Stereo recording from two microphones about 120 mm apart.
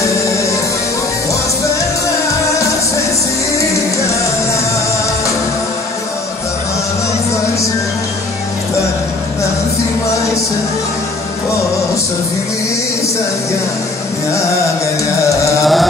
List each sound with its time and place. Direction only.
0.0 s music: 25° left (ahead or behind)
15.6 s mantra: centre (ahead or behind)